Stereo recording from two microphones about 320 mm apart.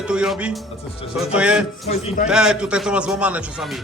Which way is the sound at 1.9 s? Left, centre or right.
Centre.